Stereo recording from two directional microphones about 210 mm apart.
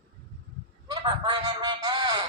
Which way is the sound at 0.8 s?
20° right (ahead or behind).